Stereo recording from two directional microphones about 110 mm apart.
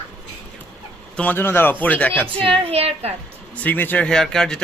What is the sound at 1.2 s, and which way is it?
Speech, 20° left (ahead or behind).